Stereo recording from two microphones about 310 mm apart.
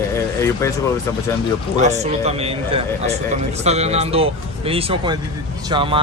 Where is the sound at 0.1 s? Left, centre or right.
Centre.